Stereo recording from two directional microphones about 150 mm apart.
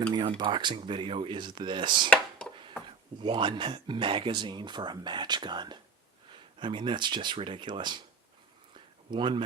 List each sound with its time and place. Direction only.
0.1 s speech: 30° right (ahead or behind)
3.2 s speech: 35° right (ahead or behind)
9.0 s speech: 30° right (ahead or behind)